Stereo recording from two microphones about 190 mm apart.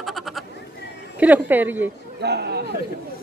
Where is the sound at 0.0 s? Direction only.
Centre (ahead or behind).